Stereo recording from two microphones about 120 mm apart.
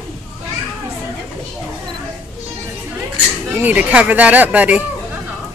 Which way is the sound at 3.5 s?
15° right (ahead or behind).